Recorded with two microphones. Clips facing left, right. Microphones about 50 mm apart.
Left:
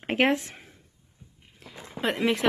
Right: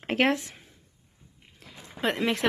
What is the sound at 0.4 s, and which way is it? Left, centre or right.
Speech, left.